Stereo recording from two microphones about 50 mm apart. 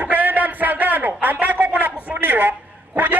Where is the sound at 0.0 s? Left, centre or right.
Right.